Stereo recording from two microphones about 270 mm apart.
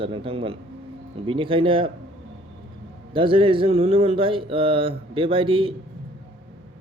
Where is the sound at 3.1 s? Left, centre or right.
Centre.